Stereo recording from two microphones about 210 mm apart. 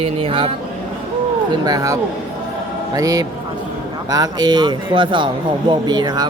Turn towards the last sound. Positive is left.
turn(degrees=-20)  # may be behind; listen again after turning